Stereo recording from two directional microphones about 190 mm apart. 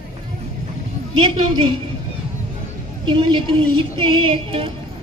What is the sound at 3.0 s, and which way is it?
A woman's voice, 25° right (ahead or behind).